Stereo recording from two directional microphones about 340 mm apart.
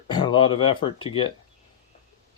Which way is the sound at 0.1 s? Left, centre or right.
Centre.